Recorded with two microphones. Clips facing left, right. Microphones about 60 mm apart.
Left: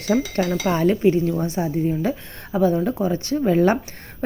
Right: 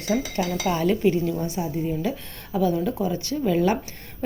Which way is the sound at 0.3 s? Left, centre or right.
Left.